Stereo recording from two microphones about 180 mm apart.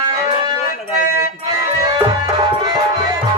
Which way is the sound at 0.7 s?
55° left (ahead or behind).